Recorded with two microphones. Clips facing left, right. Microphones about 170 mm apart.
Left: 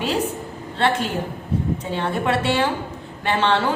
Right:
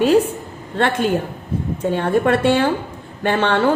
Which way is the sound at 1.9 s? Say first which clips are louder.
Right 8 dB; 50° right (ahead or behind).